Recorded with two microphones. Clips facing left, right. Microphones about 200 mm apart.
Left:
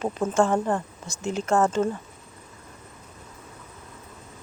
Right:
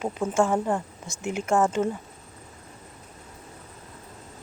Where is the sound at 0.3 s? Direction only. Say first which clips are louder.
Left 1 dB; 10° right (ahead or behind).